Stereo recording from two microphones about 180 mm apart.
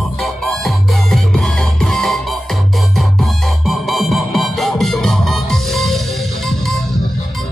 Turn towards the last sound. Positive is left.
turn(degrees=0)  # may be behind; listen again after turning